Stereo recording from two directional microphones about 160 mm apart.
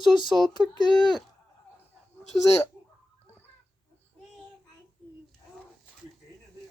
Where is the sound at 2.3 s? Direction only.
5° left (ahead or behind).